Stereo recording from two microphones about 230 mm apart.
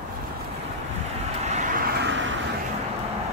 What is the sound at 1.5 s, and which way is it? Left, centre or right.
Vehicle, right.